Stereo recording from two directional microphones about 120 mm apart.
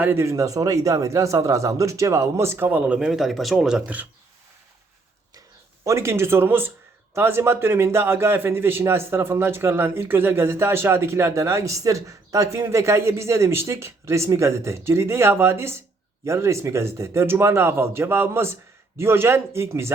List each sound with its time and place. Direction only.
0.0 s a man's voice: 20° right (ahead or behind)
5.8 s a man's voice: 25° right (ahead or behind)